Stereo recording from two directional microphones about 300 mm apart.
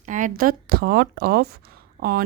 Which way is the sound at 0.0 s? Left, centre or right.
Right.